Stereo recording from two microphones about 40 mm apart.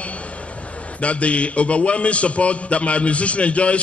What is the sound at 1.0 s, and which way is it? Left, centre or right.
A man's voice, left.